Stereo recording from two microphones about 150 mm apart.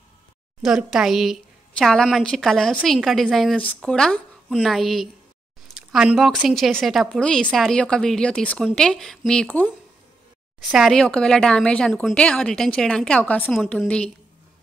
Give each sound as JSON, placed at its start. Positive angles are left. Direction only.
{"t": 0.6, "sound": "a woman's voice", "side_deg": -5}
{"t": 10.6, "sound": "a woman's voice", "side_deg": 0}